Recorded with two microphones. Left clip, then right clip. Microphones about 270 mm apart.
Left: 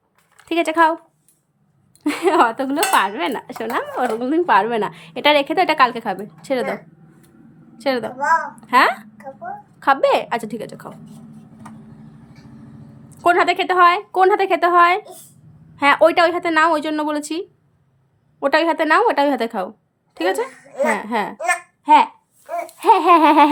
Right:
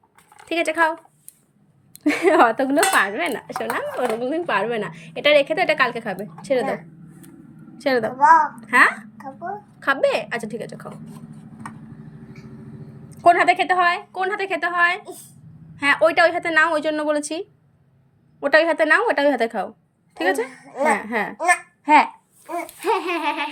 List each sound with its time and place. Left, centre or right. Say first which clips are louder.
0.3 s speech: left 4 dB; centre
2.0 s speech: even; centre
7.8 s a woman's voice: right 3 dB; centre
13.1 s a woman's voice: right 1 dB; centre